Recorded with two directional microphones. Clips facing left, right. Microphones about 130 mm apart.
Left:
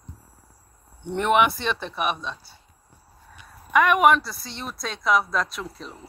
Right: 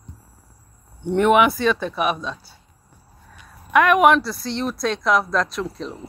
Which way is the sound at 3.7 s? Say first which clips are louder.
Right 3 dB; centre (ahead or behind).